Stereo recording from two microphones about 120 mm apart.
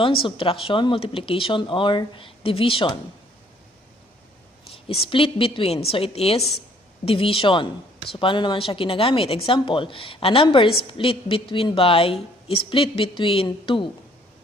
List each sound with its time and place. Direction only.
0.0 s a woman's voice: 45° left (ahead or behind)
4.7 s a woman's voice: 50° left (ahead or behind)